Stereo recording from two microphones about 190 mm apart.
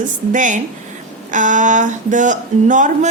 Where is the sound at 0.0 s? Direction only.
40° right (ahead or behind).